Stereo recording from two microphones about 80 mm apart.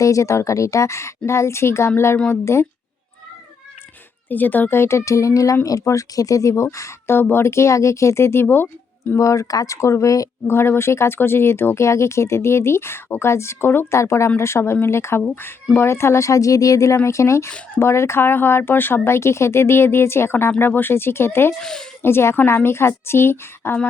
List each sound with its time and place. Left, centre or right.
0.0 s speech: left
4.3 s speech: left
9.1 s speech: left
10.5 s speech: left
21.6 s speech: centre
22.0 s speech: left